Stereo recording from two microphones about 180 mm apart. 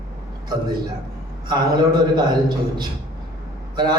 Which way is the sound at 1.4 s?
25° right (ahead or behind).